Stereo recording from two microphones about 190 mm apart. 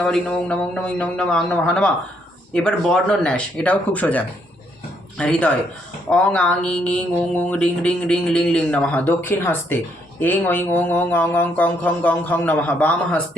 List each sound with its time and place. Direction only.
0.0 s a man's voice: 5° left (ahead or behind)
2.5 s mantra: 5° left (ahead or behind)